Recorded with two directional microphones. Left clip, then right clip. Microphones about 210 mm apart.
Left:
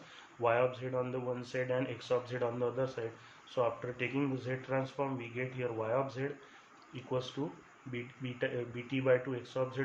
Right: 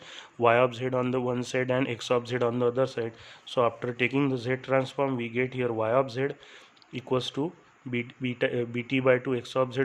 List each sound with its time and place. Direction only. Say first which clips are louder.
0.1 s speech: right 9 dB; 60° right (ahead or behind)